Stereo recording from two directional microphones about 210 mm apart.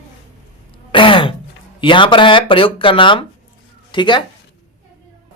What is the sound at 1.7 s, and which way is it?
Speech, 25° left (ahead or behind).